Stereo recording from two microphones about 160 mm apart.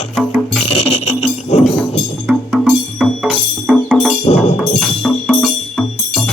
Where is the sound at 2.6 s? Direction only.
Centre (ahead or behind).